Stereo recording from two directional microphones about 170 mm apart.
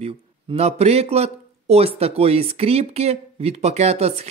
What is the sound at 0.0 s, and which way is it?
Speech, 35° right (ahead or behind).